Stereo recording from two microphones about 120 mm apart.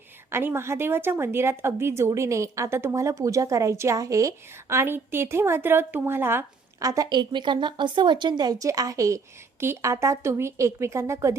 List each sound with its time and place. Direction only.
0.3 s a woman's voice: 20° right (ahead or behind)